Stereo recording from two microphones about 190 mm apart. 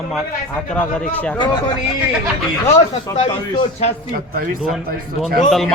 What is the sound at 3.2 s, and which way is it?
Speech, 35° left (ahead or behind).